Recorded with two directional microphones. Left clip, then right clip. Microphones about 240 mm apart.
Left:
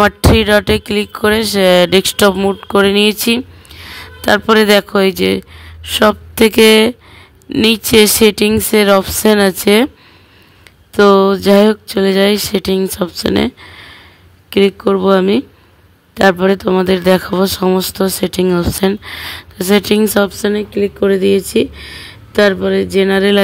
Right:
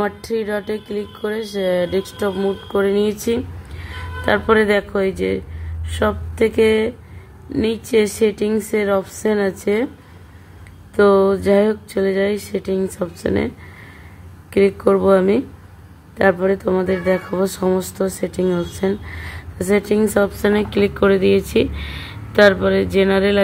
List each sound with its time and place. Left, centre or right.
0.0 s speech: left
11.0 s speech: left
14.5 s speech: left